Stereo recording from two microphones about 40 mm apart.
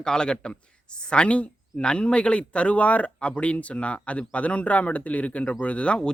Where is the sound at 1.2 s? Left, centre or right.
Left.